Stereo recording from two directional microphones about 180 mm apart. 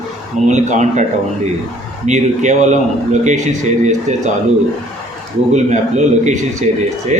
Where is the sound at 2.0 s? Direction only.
40° right (ahead or behind).